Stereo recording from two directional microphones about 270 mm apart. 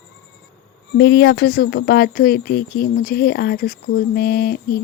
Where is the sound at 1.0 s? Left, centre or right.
Left.